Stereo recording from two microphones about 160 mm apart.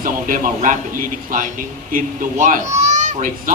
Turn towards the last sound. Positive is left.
turn(degrees=-55)  # may be behind; listen again after turning